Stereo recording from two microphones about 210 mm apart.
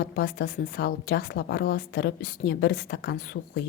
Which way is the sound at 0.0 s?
55° left (ahead or behind).